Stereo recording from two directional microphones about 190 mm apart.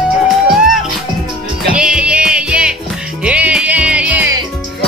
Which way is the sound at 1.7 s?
5° right (ahead or behind).